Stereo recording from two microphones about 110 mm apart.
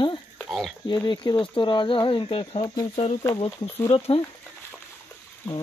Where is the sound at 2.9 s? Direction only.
75° left (ahead or behind).